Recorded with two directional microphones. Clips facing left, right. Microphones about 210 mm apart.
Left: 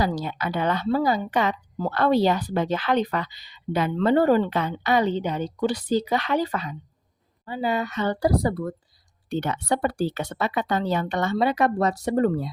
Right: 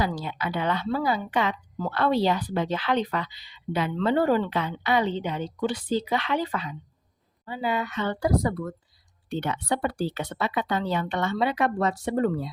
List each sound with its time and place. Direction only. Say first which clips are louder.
0.0 s a woman's voice: left 3 dB; 40° left (ahead or behind)
9.3 s speech: left 3 dB; 45° left (ahead or behind)